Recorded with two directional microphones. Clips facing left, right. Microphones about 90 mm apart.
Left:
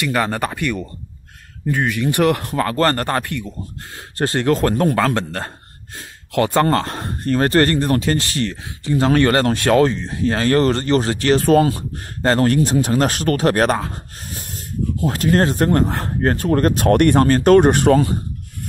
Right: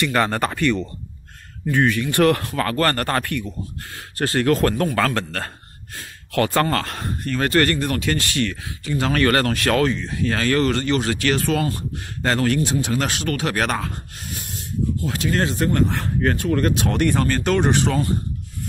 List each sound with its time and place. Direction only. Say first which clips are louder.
0.0 s speech: even; 5° left (ahead or behind); by 18.0 s 50° left (ahead or behind)